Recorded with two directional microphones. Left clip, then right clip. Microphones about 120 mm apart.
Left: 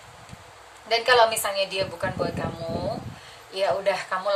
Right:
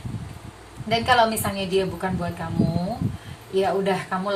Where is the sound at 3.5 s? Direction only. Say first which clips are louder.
Right 2 dB; 20° left (ahead or behind).